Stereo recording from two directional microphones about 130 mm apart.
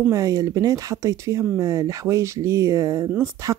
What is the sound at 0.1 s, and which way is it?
Speech, 25° right (ahead or behind).